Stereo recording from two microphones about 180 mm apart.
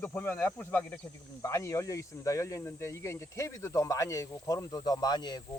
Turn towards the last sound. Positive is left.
turn(degrees=20)  # may be behind; listen again after turning